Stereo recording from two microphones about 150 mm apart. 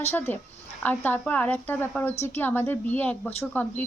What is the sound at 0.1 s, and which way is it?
Speech, 15° left (ahead or behind).